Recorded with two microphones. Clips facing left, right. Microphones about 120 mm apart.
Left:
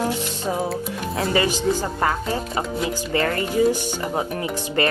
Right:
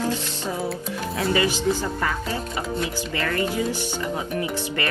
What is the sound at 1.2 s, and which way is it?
Speech, 35° left (ahead or behind).